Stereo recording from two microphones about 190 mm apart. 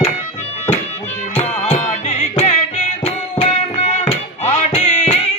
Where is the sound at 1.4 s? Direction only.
30° left (ahead or behind).